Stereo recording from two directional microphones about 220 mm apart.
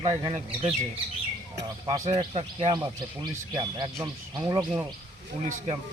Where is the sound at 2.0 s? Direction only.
25° right (ahead or behind).